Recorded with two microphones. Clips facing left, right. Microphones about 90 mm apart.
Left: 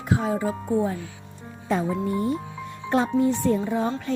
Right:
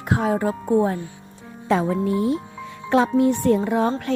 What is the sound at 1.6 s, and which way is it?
Speech, 85° right.